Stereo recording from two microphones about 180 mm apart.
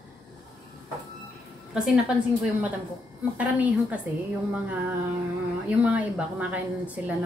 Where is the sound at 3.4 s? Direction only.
10° right (ahead or behind).